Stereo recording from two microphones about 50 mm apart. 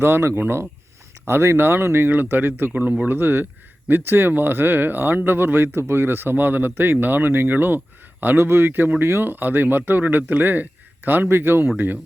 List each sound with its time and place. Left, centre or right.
0.0 s speech: right
2.0 s speech: right
3.2 s speech: right